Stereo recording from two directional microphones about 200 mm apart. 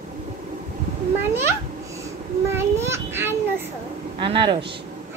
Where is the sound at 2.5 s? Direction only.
15° right (ahead or behind).